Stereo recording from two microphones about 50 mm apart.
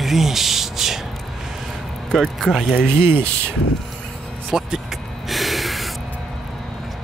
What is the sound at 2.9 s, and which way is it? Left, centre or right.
Speech, right.